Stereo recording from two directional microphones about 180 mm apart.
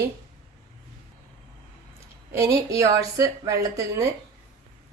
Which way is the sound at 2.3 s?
15° right (ahead or behind).